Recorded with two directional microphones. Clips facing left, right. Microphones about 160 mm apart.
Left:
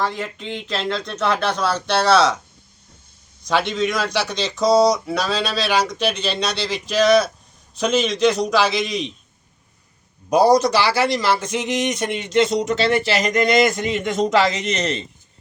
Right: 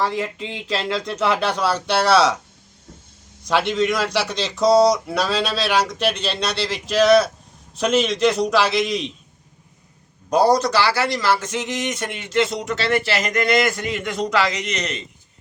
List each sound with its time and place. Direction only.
0.0 s speech: 5° right (ahead or behind)
3.4 s speech: 5° right (ahead or behind)
10.2 s a man's voice: 10° left (ahead or behind); by 15.0 s 30° left (ahead or behind)